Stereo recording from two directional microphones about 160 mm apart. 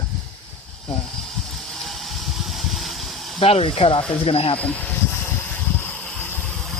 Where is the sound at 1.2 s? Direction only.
Centre (ahead or behind).